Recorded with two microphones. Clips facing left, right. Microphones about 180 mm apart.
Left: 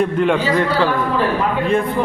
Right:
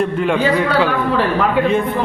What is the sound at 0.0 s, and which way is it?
Speech, centre (ahead or behind).